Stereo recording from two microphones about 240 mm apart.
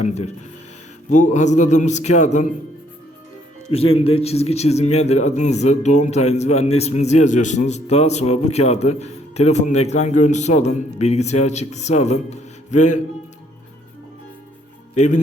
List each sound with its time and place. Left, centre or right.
0.0 s a man's voice: left
3.7 s a man's voice: left
14.9 s a man's voice: left